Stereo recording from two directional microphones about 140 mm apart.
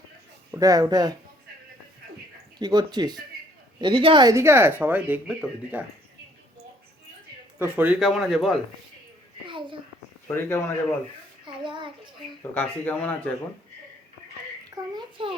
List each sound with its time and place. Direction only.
0.6 s speech: 25° right (ahead or behind)
2.6 s speech: 30° right (ahead or behind); by 5.8 s 10° right (ahead or behind)
7.6 s speech: 15° right (ahead or behind)
7.9 s speech: centre (ahead or behind)
9.5 s a sound: 35° right (ahead or behind)
10.2 s speech: 15° left (ahead or behind)
11.4 s child singing: 35° right (ahead or behind)
12.4 s speech: 15° left (ahead or behind)
14.9 s a sound: 40° right (ahead or behind)